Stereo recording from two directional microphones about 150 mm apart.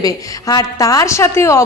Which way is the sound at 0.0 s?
25° left (ahead or behind).